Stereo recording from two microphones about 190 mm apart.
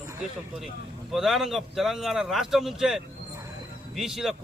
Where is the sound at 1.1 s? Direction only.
Centre (ahead or behind).